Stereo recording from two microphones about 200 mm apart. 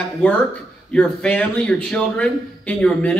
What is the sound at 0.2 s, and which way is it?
A man's voice, 5° left (ahead or behind).